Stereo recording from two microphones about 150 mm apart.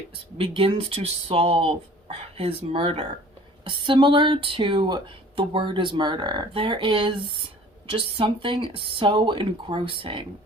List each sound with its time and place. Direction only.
0.3 s speech: 40° right (ahead or behind)